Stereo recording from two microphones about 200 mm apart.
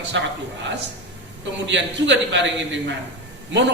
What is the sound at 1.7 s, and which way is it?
A man's voice, 65° right (ahead or behind).